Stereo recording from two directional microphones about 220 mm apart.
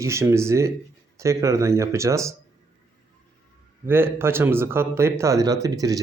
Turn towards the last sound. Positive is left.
turn(degrees=-15)  # may be behind; listen again after turning